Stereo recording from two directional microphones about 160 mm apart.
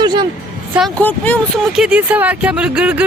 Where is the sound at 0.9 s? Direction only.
10° left (ahead or behind).